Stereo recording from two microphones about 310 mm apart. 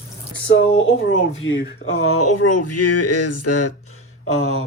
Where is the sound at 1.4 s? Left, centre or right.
Left.